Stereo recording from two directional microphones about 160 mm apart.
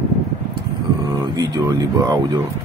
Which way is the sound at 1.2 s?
20° right (ahead or behind).